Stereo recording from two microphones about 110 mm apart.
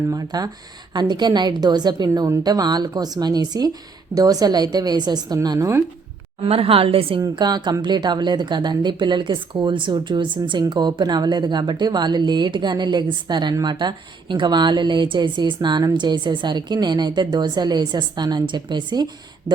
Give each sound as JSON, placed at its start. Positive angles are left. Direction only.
{"t": 0.1, "sound": "a woman's voice", "side_deg": -35}
{"t": 6.4, "sound": "a woman's voice", "side_deg": -60}
{"t": 7.2, "sound": "speech", "side_deg": -40}